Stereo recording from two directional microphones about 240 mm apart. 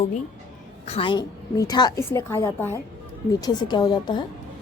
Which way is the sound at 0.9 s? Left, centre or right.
Left.